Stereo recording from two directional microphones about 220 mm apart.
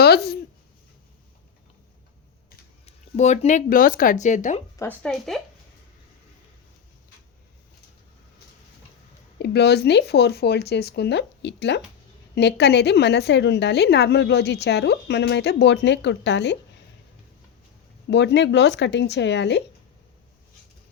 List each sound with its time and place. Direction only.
0.0 s speech: 45° left (ahead or behind)
2.8 s speech: 30° left (ahead or behind)
4.8 s speech: 5° left (ahead or behind)
9.4 s a woman's voice: 50° left (ahead or behind)
18.1 s a woman's voice: 50° left (ahead or behind)